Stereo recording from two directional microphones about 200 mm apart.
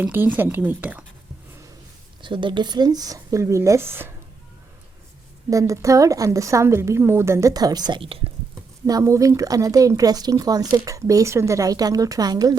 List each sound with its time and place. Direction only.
0.0 s a woman's voice: 10° right (ahead or behind)
2.2 s speech: 25° right (ahead or behind)
5.5 s a woman's voice: 15° right (ahead or behind)
8.9 s a woman's voice: 15° right (ahead or behind)